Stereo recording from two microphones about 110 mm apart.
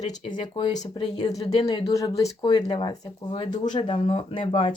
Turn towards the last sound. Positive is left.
turn(degrees=55)  # may be behind; listen again after turning